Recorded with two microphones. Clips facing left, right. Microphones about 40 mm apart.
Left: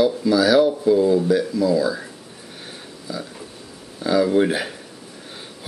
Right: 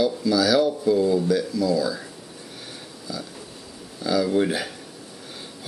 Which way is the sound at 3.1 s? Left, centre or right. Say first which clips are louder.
Left 3 dB; centre.